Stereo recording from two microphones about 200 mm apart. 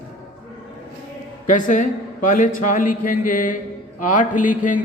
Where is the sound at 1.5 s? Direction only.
40° left (ahead or behind).